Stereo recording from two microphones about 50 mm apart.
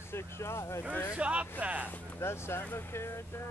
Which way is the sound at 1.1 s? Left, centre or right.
Right.